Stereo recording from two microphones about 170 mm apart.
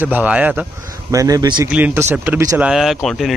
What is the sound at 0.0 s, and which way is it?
Speech, 10° right (ahead or behind).